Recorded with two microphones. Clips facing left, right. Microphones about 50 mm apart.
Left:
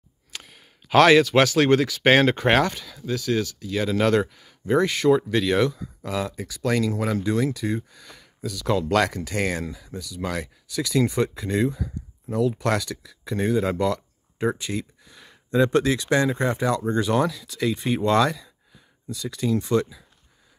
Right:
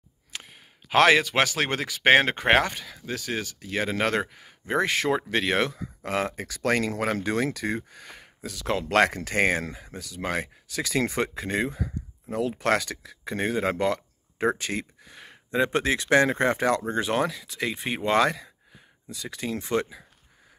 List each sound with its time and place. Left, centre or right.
0.3 s speech: right
6.3 s speech: right
7.9 s speech: right
14.4 s a sound: right
15.6 s speech: right